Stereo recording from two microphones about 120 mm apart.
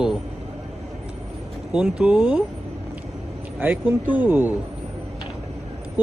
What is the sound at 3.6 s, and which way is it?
Speech, 15° right (ahead or behind).